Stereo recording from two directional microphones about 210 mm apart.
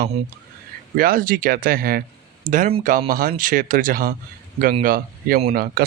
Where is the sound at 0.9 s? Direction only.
45° right (ahead or behind).